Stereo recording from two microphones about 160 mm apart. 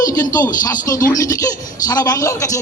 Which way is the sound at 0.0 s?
20° left (ahead or behind).